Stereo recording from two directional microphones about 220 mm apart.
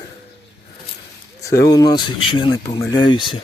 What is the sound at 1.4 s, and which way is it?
Speech, 15° left (ahead or behind).